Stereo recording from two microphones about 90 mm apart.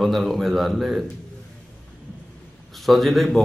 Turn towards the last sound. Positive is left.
turn(degrees=0)  # may be behind; listen again after turning